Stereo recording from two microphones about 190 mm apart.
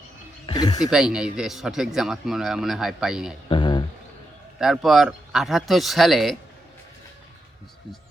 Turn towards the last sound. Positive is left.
turn(degrees=0)  # may be behind; listen again after turning